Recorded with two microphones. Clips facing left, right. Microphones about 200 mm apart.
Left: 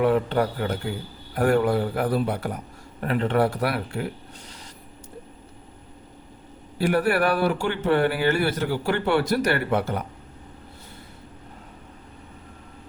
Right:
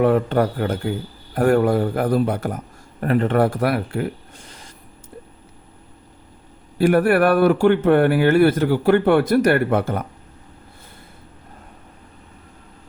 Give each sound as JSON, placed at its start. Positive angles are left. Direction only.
{"t": 0.0, "sound": "speech", "side_deg": -50}
{"t": 4.4, "sound": "a sound", "side_deg": -50}
{"t": 6.7, "sound": "speech", "side_deg": -55}